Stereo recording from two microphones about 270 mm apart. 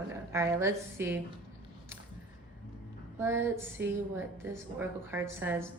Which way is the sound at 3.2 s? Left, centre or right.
Centre.